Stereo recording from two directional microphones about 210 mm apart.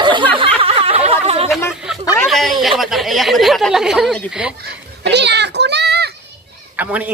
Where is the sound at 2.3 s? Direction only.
Centre (ahead or behind).